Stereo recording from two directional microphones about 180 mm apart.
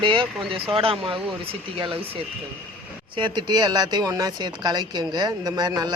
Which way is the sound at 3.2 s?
25° right (ahead or behind).